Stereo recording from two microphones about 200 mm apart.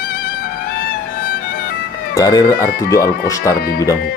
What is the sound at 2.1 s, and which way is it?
Speech, 20° left (ahead or behind).